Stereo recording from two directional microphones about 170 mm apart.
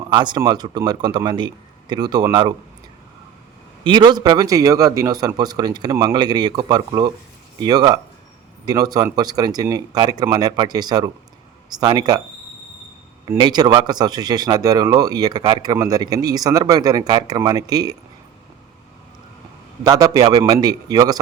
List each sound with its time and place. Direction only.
0.1 s speech: 25° right (ahead or behind)
3.8 s speech: 25° right (ahead or behind)
13.2 s speech: 25° right (ahead or behind)
19.8 s speech: 25° right (ahead or behind)